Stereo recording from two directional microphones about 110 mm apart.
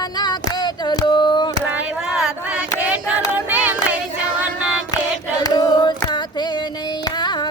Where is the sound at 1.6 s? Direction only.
15° right (ahead or behind).